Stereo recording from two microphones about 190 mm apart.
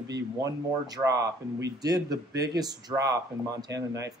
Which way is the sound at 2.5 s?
20° right (ahead or behind).